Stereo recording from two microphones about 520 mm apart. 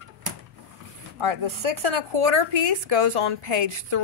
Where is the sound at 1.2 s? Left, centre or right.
Right.